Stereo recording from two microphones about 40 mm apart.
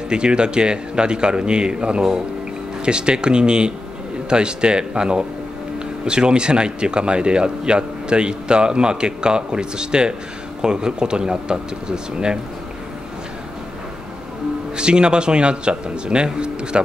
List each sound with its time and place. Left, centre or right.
0.1 s speech: right
14.8 s speech: right